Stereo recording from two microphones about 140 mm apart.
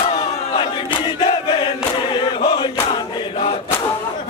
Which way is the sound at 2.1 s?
35° left (ahead or behind).